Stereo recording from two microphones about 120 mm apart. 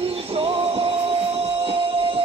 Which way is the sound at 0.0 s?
55° right (ahead or behind).